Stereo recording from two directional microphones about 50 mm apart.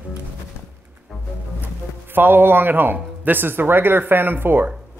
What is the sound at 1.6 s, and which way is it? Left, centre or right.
Speech, right.